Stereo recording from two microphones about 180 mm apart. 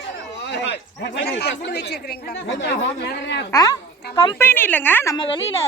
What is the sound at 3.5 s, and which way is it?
Speech, 20° left (ahead or behind).